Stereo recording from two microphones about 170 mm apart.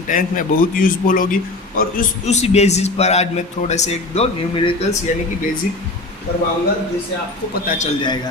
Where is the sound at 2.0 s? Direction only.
40° left (ahead or behind).